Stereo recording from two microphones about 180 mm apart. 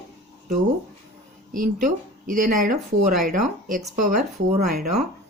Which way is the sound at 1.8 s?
45° right (ahead or behind).